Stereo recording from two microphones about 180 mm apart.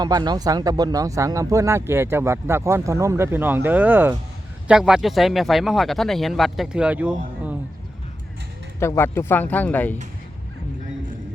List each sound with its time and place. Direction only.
0.0 s speech: 25° right (ahead or behind); by 7.1 s 5° right (ahead or behind)
8.8 s speech: 15° left (ahead or behind)